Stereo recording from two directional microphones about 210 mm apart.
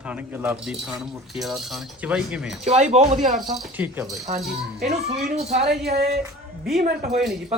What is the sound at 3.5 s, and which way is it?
Speech, 10° right (ahead or behind).